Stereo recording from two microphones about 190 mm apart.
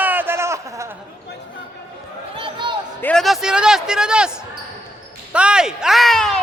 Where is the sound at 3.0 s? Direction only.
5° left (ahead or behind).